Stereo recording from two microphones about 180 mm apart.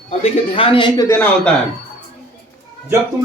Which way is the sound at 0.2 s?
30° left (ahead or behind).